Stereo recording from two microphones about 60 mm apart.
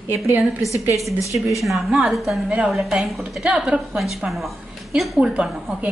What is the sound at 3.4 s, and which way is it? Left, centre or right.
Speech, centre.